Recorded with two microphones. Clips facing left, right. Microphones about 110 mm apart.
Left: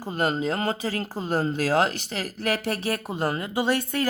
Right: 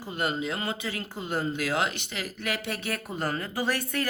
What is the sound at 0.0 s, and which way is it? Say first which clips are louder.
A woman's voice: left 5 dB; 40° left (ahead or behind).